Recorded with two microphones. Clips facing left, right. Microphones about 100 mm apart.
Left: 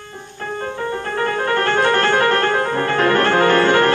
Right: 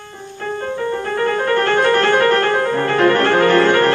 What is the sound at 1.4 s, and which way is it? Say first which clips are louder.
Music: right 1 dB; 15° left (ahead or behind).